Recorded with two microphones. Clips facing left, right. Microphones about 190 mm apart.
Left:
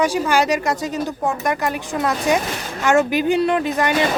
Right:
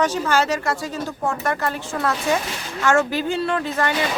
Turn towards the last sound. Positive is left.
turn(degrees=15)  # may be behind; listen again after turning